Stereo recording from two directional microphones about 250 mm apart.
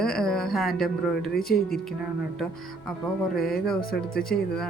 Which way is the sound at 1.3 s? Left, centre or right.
Left.